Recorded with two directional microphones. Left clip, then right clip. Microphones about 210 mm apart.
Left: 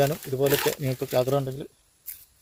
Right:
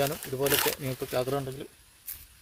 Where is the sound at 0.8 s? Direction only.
40° left (ahead or behind).